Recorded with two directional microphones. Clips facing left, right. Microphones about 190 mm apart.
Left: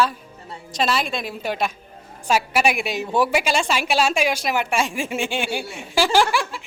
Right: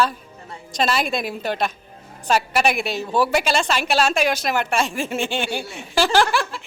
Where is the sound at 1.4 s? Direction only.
10° left (ahead or behind).